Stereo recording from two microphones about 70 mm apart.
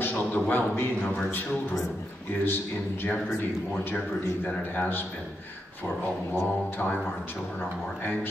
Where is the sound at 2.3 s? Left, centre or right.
Left.